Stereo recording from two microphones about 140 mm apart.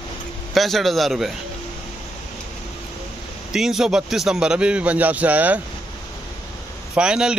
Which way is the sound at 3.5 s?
5° right (ahead or behind).